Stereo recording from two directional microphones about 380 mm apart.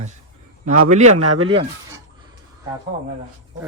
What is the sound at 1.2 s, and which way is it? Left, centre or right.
Speech, right.